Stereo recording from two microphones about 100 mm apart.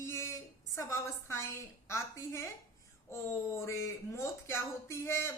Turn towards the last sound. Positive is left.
turn(degrees=25)  # may be behind; listen again after turning